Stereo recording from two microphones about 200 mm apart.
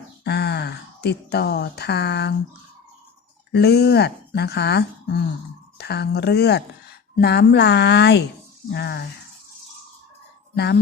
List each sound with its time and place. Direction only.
0.3 s speech: 55° left (ahead or behind)
3.5 s a woman's voice: 55° left (ahead or behind)
10.5 s speech: 55° left (ahead or behind)